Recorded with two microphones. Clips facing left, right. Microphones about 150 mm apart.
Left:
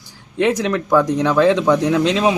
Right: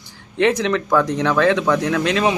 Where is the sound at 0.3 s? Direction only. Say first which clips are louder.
Even; 10° left (ahead or behind).